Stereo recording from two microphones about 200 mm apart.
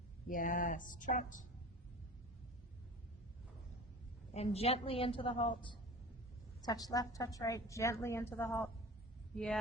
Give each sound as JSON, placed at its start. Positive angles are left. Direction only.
{"t": 0.3, "sound": "speech", "side_deg": 40}
{"t": 4.4, "sound": "a woman's voice", "side_deg": 30}